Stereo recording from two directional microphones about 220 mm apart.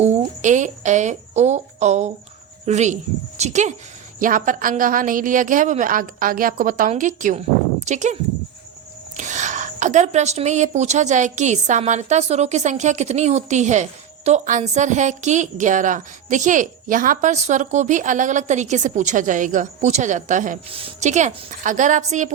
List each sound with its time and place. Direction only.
0.0 s a woman's voice: 30° right (ahead or behind)
20.7 s a woman's voice: 25° right (ahead or behind)